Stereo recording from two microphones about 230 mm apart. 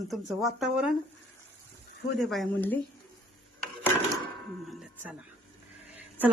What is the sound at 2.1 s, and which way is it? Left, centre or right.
Speech, centre.